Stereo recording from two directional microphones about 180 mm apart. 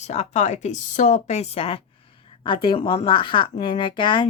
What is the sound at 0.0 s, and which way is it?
Speech, 40° left (ahead or behind).